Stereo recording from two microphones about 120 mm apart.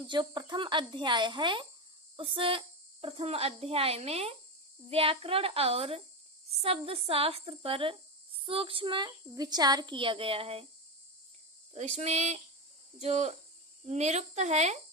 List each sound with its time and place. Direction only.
0.1 s speech: 40° right (ahead or behind)
11.7 s a woman's voice: 65° right (ahead or behind)